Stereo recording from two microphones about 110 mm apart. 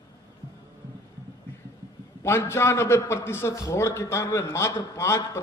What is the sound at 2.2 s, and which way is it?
A man's voice, 20° left (ahead or behind).